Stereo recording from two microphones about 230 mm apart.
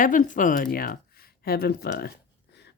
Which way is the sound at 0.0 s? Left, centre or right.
Left.